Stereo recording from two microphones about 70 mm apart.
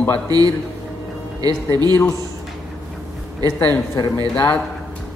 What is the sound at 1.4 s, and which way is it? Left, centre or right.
Speech, right.